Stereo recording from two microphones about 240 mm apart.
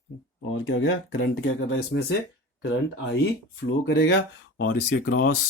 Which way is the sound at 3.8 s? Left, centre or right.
Left.